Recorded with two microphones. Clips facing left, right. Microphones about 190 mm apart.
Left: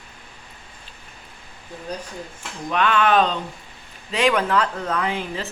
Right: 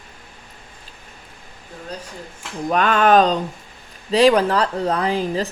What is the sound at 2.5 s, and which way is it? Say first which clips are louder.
A woman's voice: right 3 dB; 35° right (ahead or behind).